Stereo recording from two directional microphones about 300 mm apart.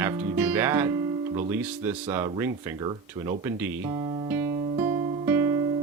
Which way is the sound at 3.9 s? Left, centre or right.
Centre.